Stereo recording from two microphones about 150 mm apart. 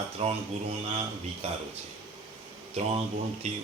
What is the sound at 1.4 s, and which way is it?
Speech, 45° right (ahead or behind).